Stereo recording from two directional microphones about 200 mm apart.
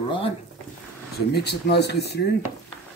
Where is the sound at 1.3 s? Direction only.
55° left (ahead or behind).